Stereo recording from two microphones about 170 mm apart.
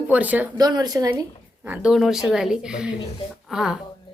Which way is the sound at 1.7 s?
5° right (ahead or behind).